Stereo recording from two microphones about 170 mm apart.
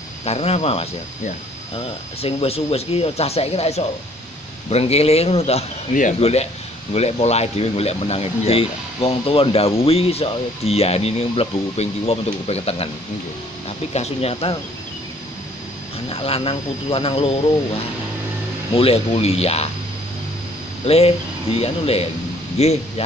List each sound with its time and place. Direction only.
0.2 s speech: 40° left (ahead or behind)
16.1 s speech: 35° left (ahead or behind)
18.7 s speech: 35° left (ahead or behind)
20.8 s speech: 35° left (ahead or behind)